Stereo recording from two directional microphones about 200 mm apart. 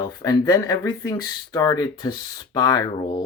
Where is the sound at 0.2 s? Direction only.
15° left (ahead or behind).